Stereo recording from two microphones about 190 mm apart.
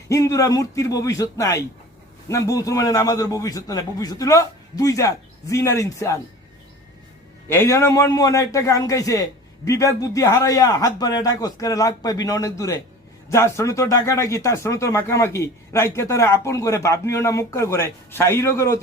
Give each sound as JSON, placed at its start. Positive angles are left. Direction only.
{"t": 0.1, "sound": "speech", "side_deg": 15}
{"t": 7.4, "sound": "a man's voice", "side_deg": 10}